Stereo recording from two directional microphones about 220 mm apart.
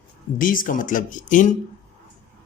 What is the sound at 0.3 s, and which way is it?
Speech, 40° left (ahead or behind).